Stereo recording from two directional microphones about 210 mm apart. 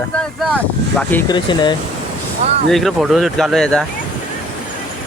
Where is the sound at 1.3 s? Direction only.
20° left (ahead or behind).